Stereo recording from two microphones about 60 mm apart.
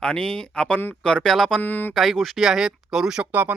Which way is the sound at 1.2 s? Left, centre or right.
Centre.